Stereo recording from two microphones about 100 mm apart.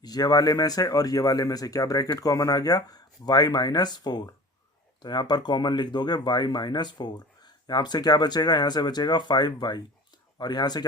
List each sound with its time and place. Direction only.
0.0 s speech: 40° left (ahead or behind)